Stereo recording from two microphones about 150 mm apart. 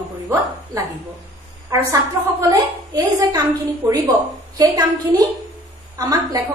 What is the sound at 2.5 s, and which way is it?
Speech, 25° right (ahead or behind).